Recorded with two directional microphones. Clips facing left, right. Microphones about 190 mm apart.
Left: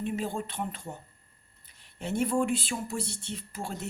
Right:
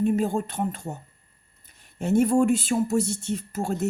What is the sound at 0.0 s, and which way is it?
Speech, 45° right (ahead or behind).